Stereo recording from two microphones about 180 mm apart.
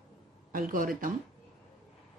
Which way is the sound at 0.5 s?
50° right (ahead or behind).